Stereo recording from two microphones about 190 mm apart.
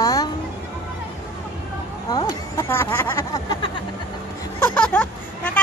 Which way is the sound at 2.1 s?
15° left (ahead or behind).